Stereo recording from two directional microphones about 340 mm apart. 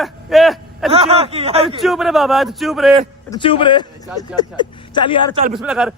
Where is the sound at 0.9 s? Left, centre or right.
Centre.